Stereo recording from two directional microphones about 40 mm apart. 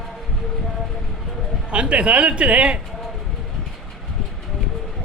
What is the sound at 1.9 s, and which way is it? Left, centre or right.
Speech, right.